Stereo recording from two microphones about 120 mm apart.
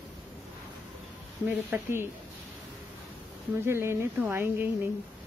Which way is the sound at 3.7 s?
20° right (ahead or behind).